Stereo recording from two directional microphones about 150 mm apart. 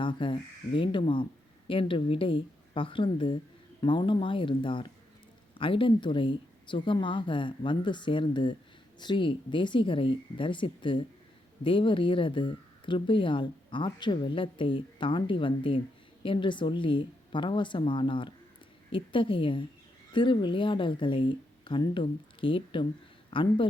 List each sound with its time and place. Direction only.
0.0 s speech: 35° left (ahead or behind)